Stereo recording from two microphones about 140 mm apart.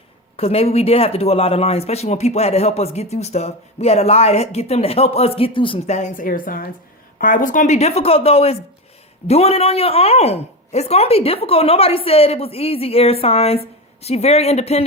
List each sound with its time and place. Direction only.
0.3 s a woman's voice: 45° left (ahead or behind)
5.9 s a woman's voice: 65° left (ahead or behind); by 6.7 s 90° left
7.2 s a woman's voice: 75° left (ahead or behind); by 14.8 s 45° left (ahead or behind)